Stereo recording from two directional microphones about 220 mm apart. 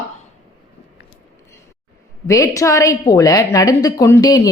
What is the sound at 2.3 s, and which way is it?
A woman's voice, 15° left (ahead or behind).